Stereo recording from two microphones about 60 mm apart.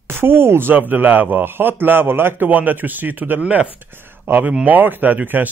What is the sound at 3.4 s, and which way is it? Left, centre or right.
Speech, centre.